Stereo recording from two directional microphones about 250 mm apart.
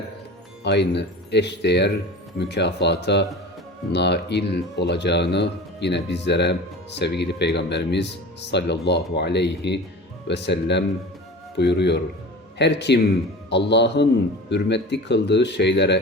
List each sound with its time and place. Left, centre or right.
0.6 s speech: left